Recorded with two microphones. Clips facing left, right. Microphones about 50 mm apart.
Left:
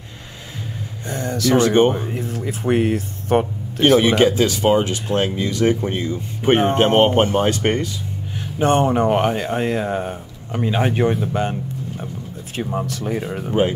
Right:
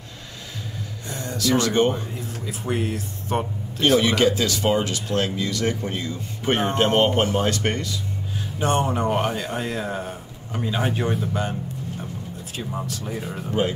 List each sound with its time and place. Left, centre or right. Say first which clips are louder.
1.0 s speech: left 5 dB; left
1.5 s speech: left 5 dB; left
2.1 s speech: left 6 dB; left
12.5 s speech: left 7 dB; left
13.5 s speech: left 5 dB; left